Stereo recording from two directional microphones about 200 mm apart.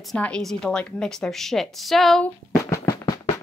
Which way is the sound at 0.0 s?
5° left (ahead or behind).